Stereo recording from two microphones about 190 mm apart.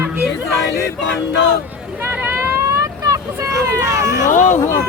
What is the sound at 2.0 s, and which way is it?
Vehicle, 10° right (ahead or behind).